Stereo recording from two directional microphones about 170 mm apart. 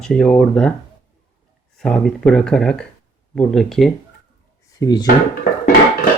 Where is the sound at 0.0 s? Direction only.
5° left (ahead or behind).